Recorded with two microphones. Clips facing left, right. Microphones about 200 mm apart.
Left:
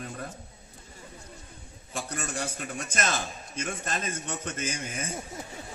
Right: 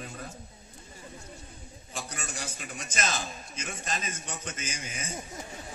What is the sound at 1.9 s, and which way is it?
A man's voice, 50° left (ahead or behind).